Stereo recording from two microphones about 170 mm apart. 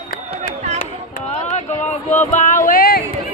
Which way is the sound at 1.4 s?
45° left (ahead or behind).